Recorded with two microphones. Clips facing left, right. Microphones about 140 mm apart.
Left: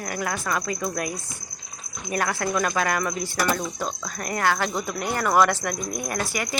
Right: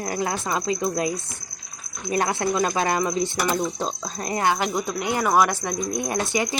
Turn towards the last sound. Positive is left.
turn(degrees=-25)  # may be behind; listen again after turning